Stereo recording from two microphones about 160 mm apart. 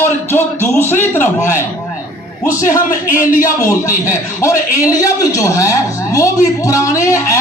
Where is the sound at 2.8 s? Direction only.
55° left (ahead or behind).